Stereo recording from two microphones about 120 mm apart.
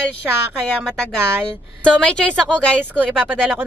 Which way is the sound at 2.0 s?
10° left (ahead or behind).